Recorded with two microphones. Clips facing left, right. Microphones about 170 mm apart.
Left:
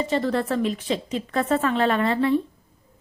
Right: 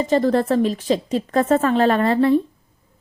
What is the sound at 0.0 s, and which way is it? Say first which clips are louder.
A woman's voice: right 6 dB; 40° right (ahead or behind).